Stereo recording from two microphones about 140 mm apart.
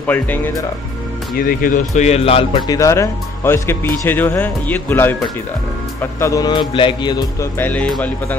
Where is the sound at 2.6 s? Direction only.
25° left (ahead or behind).